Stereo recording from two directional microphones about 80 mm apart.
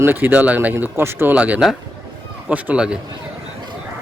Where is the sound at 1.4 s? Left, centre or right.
Centre.